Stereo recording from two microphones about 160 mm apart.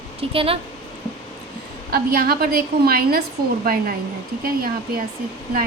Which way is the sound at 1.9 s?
70° right (ahead or behind).